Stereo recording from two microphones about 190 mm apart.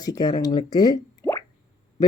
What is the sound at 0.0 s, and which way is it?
A woman's voice, 20° left (ahead or behind).